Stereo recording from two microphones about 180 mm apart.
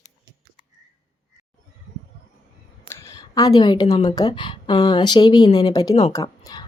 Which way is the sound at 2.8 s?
15° left (ahead or behind).